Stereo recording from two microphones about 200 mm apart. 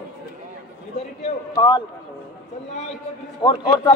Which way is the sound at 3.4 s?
20° left (ahead or behind).